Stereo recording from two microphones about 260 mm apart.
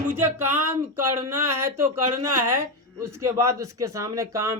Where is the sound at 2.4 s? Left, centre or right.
Right.